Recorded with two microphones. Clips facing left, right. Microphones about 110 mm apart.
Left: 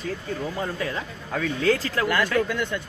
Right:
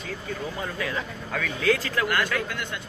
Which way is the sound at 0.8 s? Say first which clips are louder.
Left 1 dB; 30° left (ahead or behind).